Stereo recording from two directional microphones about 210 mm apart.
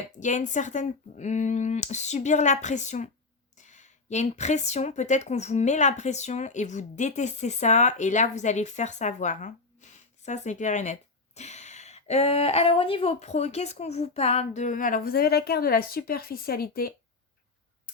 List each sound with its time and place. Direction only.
0.2 s a woman's voice: 35° left (ahead or behind)